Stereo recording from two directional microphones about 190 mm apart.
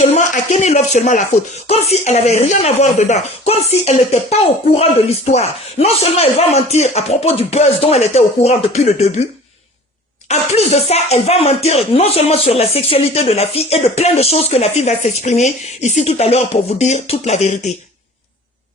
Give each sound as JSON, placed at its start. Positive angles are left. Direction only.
{"t": 0.0, "sound": "speech", "side_deg": 35}
{"t": 10.2, "sound": "speech", "side_deg": 35}